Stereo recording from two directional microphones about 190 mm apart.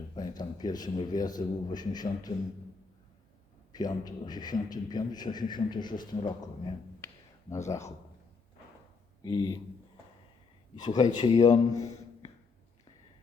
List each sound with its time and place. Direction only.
0.2 s a man's voice: 20° left (ahead or behind)
3.7 s a man's voice: 20° left (ahead or behind)
7.0 s a sound: 15° left (ahead or behind)
7.5 s speech: 15° left (ahead or behind)
9.2 s a man's voice: 20° left (ahead or behind)
10.8 s a man's voice: 20° left (ahead or behind)